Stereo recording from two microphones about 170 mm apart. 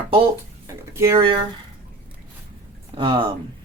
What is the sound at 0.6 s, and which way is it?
Speech, 15° right (ahead or behind).